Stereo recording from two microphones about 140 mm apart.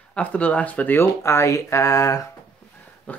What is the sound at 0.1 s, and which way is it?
Speech, 10° left (ahead or behind).